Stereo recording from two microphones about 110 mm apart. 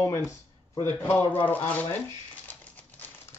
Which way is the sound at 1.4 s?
15° left (ahead or behind).